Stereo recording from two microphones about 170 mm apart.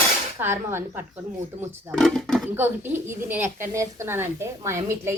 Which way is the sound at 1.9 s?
5° left (ahead or behind).